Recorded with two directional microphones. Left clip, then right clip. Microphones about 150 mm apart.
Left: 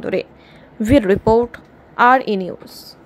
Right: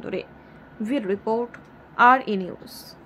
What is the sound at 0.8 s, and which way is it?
Speech, 60° left (ahead or behind).